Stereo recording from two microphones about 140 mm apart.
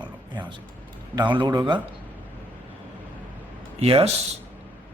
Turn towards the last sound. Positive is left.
turn(degrees=-45)  # may be behind; listen again after turning